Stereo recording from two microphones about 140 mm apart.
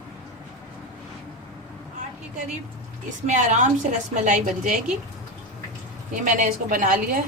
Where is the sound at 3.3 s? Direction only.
60° right (ahead or behind).